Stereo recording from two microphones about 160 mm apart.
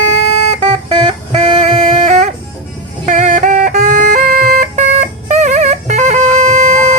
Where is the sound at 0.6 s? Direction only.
40° right (ahead or behind).